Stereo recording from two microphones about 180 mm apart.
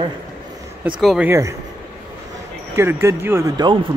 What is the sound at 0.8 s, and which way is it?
Speech, 5° right (ahead or behind).